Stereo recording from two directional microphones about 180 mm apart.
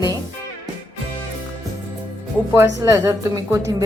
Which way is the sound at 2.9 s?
15° right (ahead or behind).